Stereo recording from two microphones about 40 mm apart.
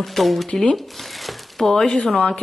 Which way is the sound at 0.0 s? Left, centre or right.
Centre.